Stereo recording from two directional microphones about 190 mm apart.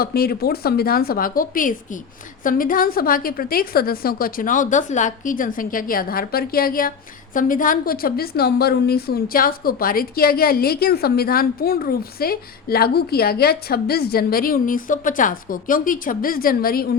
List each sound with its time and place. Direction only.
0.0 s a woman's voice: 55° left (ahead or behind)